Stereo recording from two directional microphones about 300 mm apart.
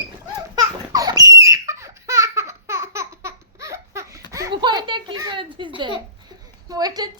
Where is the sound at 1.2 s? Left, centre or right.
Centre.